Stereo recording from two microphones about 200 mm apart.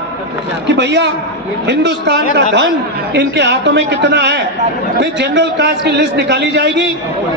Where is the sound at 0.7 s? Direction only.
60° right (ahead or behind).